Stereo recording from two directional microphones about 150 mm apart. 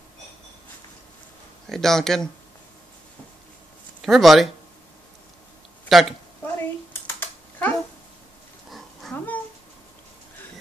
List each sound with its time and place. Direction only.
1.7 s speech: 5° left (ahead or behind)
4.0 s speech: centre (ahead or behind)
5.9 s speech: centre (ahead or behind)
6.4 s typing: 15° left (ahead or behind)
8.6 s a sound: centre (ahead or behind)
9.1 s a sound: 10° left (ahead or behind)